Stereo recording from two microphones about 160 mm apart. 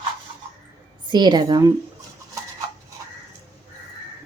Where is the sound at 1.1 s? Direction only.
25° right (ahead or behind).